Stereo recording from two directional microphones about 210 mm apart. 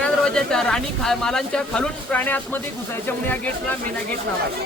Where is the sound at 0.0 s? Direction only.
5° left (ahead or behind).